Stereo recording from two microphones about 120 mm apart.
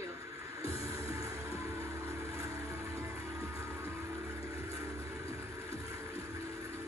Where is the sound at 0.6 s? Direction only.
30° right (ahead or behind).